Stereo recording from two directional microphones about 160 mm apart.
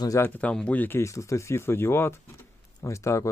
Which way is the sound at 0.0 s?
20° left (ahead or behind).